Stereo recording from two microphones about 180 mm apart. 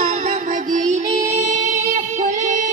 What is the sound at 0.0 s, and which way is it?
Music, 40° right (ahead or behind).